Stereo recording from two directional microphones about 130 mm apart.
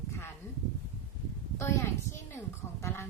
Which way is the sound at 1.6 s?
20° left (ahead or behind).